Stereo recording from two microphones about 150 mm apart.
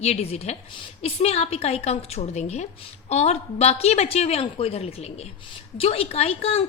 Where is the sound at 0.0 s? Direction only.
45° left (ahead or behind).